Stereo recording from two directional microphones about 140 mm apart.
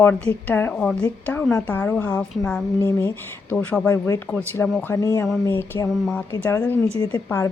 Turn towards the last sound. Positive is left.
turn(degrees=20)  # may be behind; listen again after turning